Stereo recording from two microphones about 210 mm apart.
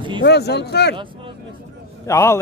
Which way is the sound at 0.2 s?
50° left (ahead or behind).